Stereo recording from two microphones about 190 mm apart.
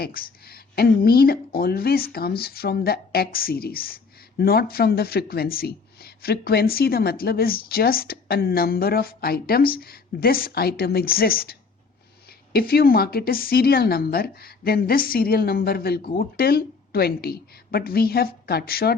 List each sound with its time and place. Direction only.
0.0 s speech: 50° left (ahead or behind)
12.5 s speech: 55° left (ahead or behind)